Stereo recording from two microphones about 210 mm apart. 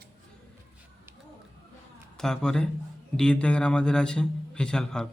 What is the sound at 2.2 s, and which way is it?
Speech, 5° left (ahead or behind).